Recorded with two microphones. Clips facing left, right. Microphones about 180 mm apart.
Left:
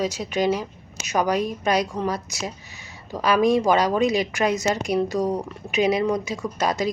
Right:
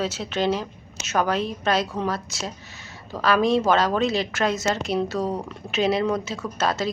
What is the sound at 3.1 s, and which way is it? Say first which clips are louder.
Speech: left 1 dB; 15° left (ahead or behind).